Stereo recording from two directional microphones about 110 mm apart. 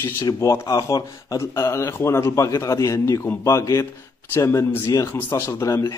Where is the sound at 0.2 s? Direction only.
30° left (ahead or behind).